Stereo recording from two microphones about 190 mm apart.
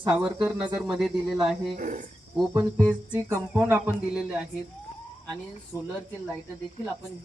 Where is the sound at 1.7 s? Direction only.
40° right (ahead or behind).